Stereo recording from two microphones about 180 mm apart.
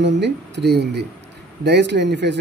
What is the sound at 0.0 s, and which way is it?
Speech, 75° right (ahead or behind).